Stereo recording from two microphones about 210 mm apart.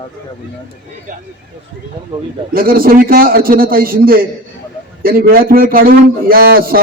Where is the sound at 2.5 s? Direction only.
45° right (ahead or behind).